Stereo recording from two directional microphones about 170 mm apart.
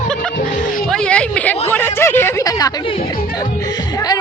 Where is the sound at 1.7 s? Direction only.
10° left (ahead or behind).